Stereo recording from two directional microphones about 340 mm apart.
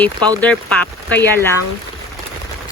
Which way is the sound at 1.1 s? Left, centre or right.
Centre.